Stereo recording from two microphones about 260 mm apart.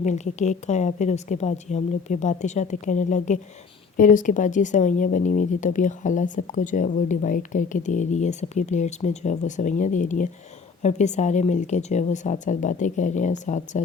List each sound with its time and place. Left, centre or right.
0.0 s speech: left